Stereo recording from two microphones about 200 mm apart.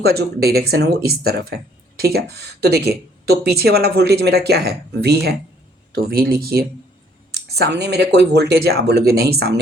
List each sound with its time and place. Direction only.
0.0 s speech: 55° right (ahead or behind)